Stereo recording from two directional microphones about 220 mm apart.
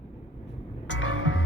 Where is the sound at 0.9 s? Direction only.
60° left (ahead or behind).